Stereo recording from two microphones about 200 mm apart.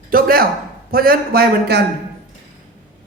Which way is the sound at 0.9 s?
45° right (ahead or behind).